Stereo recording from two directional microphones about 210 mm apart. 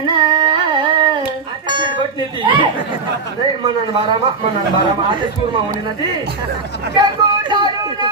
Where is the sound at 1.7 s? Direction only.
25° right (ahead or behind).